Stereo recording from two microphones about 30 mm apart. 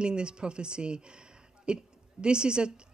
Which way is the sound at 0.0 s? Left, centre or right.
Right.